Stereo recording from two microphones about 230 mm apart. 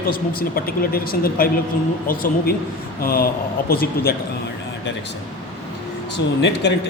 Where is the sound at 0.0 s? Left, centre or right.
Left.